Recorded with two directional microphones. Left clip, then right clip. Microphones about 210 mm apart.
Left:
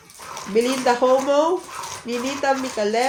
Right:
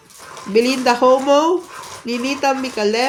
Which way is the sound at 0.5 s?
55° right (ahead or behind).